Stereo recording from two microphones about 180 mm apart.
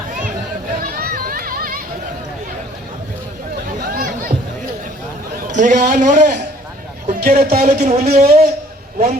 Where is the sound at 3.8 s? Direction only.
55° right (ahead or behind).